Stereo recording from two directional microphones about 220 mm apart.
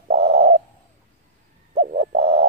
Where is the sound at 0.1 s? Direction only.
30° right (ahead or behind).